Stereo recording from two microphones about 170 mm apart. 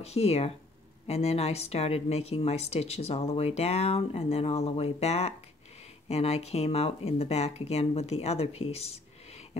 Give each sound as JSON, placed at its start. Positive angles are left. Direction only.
{"t": 0.0, "sound": "speech", "side_deg": 35}